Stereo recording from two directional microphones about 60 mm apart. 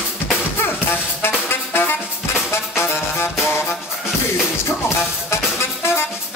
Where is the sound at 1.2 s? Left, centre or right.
Left.